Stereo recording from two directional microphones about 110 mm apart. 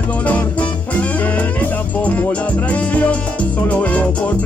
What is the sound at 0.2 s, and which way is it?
Music, 15° left (ahead or behind).